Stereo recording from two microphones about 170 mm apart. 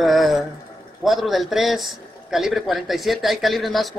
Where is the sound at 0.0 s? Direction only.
Centre (ahead or behind).